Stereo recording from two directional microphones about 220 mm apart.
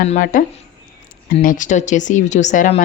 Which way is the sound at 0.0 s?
35° left (ahead or behind).